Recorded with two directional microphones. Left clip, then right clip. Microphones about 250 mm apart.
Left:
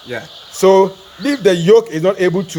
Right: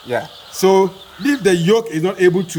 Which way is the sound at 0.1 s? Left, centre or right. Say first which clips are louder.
Right 5 dB; right.